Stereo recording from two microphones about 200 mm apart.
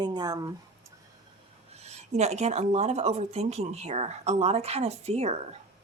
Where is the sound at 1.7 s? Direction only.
30° right (ahead or behind).